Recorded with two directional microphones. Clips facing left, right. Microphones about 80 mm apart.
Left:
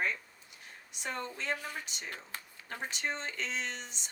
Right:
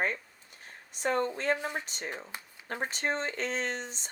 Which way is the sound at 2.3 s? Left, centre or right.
Centre.